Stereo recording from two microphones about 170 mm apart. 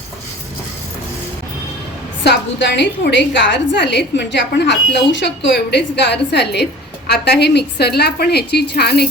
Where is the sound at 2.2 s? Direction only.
90° left.